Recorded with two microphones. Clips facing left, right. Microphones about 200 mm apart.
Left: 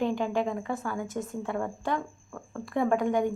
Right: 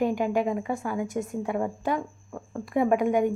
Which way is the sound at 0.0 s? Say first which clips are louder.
Right 3 dB; 15° right (ahead or behind).